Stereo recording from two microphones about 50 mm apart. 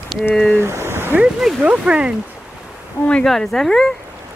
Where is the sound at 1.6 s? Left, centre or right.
Right.